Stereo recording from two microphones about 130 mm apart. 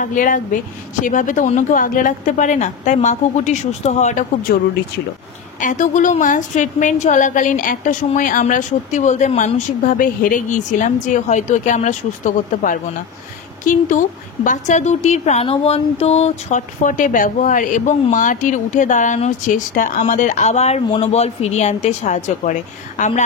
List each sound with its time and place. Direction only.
0.0 s a woman's voice: 90° left
5.6 s a woman's voice: 80° left